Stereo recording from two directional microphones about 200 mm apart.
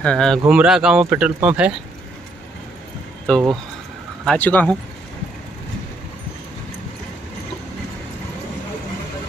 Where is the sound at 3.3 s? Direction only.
5° left (ahead or behind).